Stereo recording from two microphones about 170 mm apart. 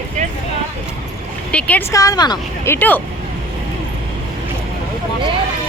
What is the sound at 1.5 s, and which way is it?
Speech, 10° left (ahead or behind).